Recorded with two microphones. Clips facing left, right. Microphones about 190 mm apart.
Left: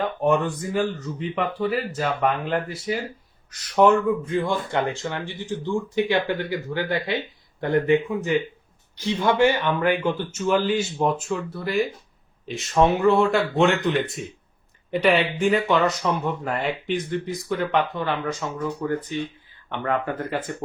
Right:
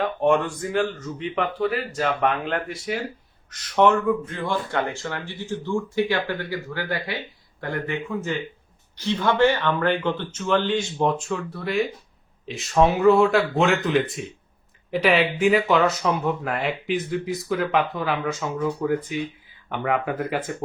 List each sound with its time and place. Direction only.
0.2 s speech: centre (ahead or behind)